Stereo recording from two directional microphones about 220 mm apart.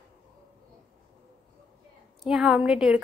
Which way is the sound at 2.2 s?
Centre (ahead or behind).